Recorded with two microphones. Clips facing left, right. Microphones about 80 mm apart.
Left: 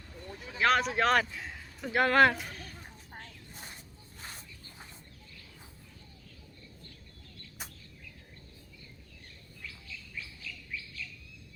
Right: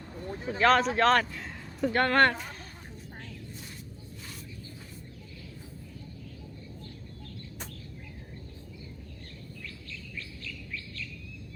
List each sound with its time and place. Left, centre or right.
0.6 s speech: centre
2.5 s a sound: right
9.6 s chirp: centre